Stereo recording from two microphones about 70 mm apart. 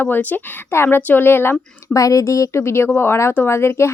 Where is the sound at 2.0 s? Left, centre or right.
Left.